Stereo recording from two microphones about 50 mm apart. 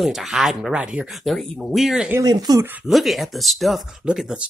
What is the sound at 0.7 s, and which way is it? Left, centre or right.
Speech, right.